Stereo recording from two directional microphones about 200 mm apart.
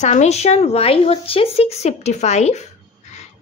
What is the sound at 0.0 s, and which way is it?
A woman's voice, 35° left (ahead or behind).